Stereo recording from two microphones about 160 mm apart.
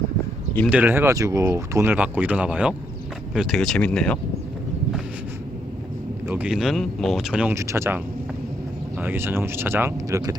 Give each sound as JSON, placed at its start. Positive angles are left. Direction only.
{"t": 0.7, "sound": "speech", "side_deg": -10}
{"t": 6.2, "sound": "speech", "side_deg": -10}
{"t": 7.5, "sound": "speech", "side_deg": -20}